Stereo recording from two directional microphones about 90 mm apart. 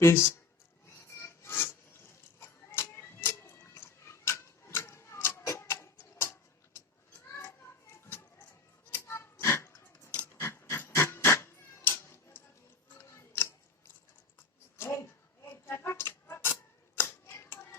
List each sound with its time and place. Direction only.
0.0 s speech: 30° left (ahead or behind)
0.9 s filing: 30° left (ahead or behind)
8.0 s a sound: 25° left (ahead or behind)
10.4 s cat: 30° left (ahead or behind)
12.9 s chewing: 25° left (ahead or behind)
14.8 s a sound: 30° left (ahead or behind)
17.0 s hands: 25° left (ahead or behind)